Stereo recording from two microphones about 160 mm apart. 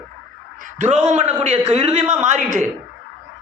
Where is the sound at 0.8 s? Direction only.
45° right (ahead or behind).